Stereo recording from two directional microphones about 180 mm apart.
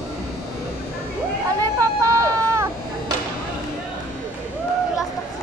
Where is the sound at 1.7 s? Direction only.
15° right (ahead or behind).